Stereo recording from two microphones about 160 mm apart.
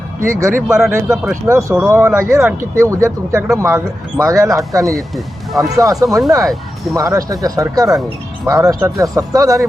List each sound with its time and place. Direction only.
0.3 s speech: 15° right (ahead or behind)
4.9 s speech: centre (ahead or behind)
5.5 s speech: 20° right (ahead or behind)
6.1 s speech: centre (ahead or behind)
6.9 s speech: 20° right (ahead or behind)